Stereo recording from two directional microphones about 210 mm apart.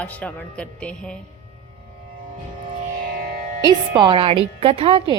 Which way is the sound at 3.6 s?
20° right (ahead or behind).